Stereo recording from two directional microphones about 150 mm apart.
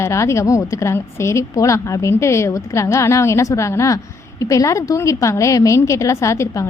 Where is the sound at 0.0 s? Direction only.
20° left (ahead or behind).